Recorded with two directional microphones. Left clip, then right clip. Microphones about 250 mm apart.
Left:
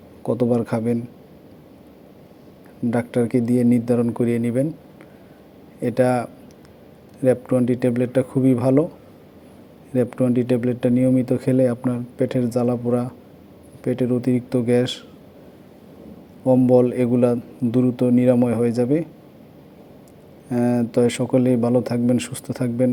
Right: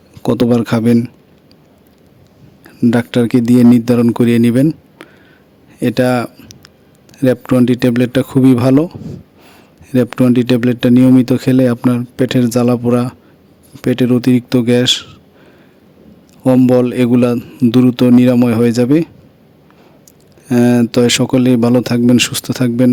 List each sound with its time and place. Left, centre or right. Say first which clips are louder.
0.2 s speech: right 7 dB; right
2.8 s speech: right 8 dB; right
9.9 s speech: right 8 dB; right
16.4 s speech: right 5 dB; right
20.5 s speech: right 9 dB; right